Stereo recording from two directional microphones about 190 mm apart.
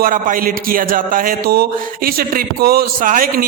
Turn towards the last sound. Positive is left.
turn(degrees=-45)  # may be behind; listen again after turning